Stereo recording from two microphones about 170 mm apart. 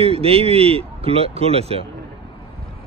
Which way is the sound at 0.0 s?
35° right (ahead or behind).